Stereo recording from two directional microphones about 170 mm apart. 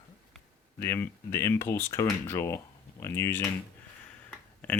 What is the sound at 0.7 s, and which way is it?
Speech, 15° left (ahead or behind).